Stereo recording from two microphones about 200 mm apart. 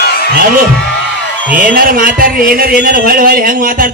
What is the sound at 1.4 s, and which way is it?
A man's voice, 45° right (ahead or behind).